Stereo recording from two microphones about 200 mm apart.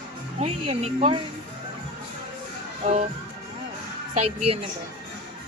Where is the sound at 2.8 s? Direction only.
30° right (ahead or behind).